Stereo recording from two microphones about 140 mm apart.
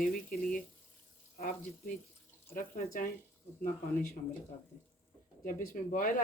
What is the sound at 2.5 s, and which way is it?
Speech, 75° left (ahead or behind).